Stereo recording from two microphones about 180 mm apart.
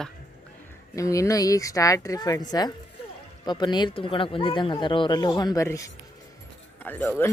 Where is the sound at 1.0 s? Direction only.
15° left (ahead or behind).